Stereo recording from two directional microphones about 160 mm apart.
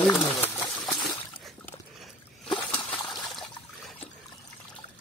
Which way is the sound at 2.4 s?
35° left (ahead or behind).